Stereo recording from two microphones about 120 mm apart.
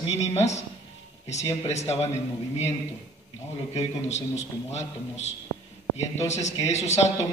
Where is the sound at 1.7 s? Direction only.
70° left (ahead or behind).